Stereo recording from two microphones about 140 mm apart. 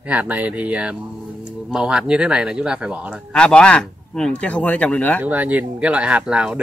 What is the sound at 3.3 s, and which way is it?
Speech, 5° left (ahead or behind).